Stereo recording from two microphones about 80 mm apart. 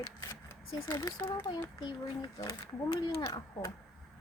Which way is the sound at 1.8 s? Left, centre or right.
Left.